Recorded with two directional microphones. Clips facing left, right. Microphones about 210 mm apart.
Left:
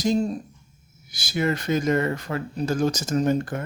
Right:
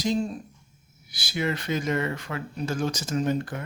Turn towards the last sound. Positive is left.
turn(degrees=45)  # may be behind; listen again after turning